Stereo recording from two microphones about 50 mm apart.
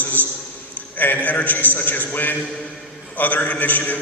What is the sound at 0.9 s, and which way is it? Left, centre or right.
A man's voice, left.